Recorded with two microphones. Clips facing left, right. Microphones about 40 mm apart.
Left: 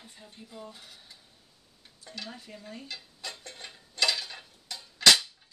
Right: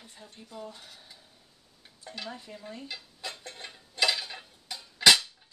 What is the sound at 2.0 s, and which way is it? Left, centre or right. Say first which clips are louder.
Stir: right 2 dB; centre.